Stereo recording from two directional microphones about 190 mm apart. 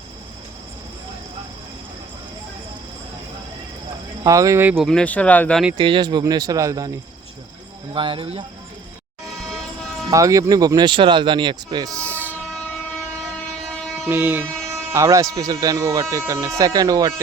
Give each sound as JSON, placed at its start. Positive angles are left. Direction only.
{"t": 4.2, "sound": "speech", "side_deg": -15}
{"t": 4.9, "sound": "speech", "side_deg": 5}
{"t": 5.7, "sound": "speech", "side_deg": -25}
{"t": 7.9, "sound": "speech", "side_deg": -25}
{"t": 10.1, "sound": "speech", "side_deg": -15}
{"t": 12.1, "sound": "train", "side_deg": -10}
{"t": 12.5, "sound": "train", "side_deg": 5}
{"t": 14.1, "sound": "speech", "side_deg": -10}